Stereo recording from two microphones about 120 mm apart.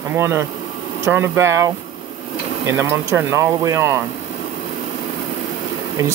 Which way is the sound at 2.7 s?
20° right (ahead or behind).